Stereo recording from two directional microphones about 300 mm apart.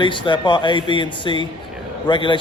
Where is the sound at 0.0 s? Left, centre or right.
Centre.